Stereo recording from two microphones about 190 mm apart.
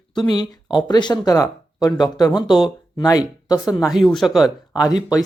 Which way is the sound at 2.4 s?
Centre (ahead or behind).